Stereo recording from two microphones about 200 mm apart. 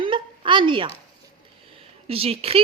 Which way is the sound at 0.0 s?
25° right (ahead or behind).